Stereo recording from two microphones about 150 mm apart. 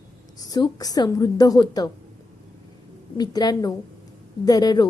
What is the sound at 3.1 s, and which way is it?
A woman's voice, 25° left (ahead or behind).